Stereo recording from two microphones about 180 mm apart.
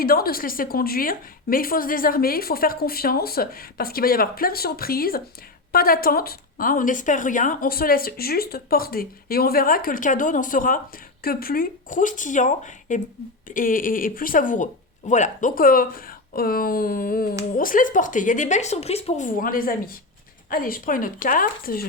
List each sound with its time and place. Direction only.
0.0 s a woman's voice: 55° left (ahead or behind)